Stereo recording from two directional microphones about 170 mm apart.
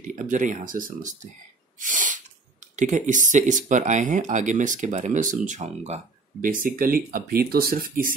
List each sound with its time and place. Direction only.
0.0 s speech: 50° right (ahead or behind)
1.8 s sneeze: 50° right (ahead or behind)
2.7 s speech: 50° right (ahead or behind)
6.4 s speech: 55° right (ahead or behind)